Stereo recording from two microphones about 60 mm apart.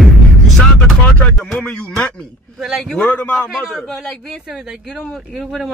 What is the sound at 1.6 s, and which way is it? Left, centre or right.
Speech, centre.